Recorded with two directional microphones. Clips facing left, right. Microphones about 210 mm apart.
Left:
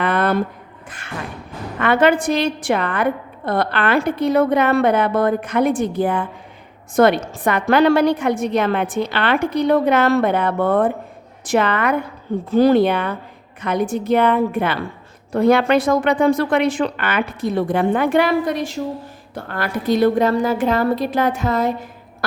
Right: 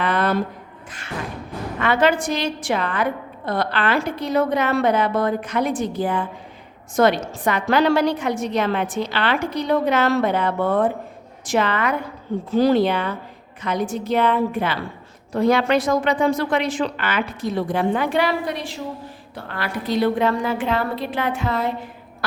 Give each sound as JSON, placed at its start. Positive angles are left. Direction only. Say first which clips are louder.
{"t": 0.0, "sound": "a sound", "louder": "left 2 dB", "side_deg": 55}
{"t": 0.9, "sound": "music", "louder": "left 1 dB", "side_deg": 55}
{"t": 1.8, "sound": "a woman's voice", "louder": "left 3 dB", "side_deg": 55}